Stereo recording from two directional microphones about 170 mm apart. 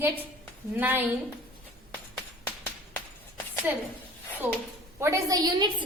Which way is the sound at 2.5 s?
10° left (ahead or behind).